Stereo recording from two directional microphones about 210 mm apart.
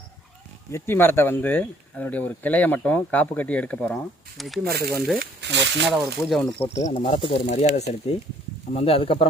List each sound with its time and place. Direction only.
0.7 s speech: 10° left (ahead or behind)
4.6 s speech: 45° right (ahead or behind)
5.9 s speech: centre (ahead or behind)
6.7 s speech: 30° left (ahead or behind)